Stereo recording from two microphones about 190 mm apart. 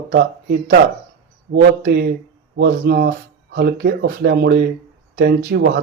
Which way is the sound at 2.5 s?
60° right (ahead or behind).